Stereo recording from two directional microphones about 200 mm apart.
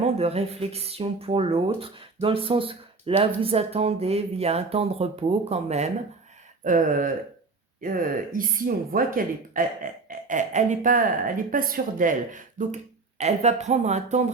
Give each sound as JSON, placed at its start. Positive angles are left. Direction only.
{"t": 0.0, "sound": "speech", "side_deg": -30}